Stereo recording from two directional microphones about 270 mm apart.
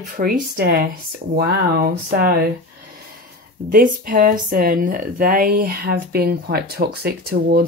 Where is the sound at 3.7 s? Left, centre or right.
Right.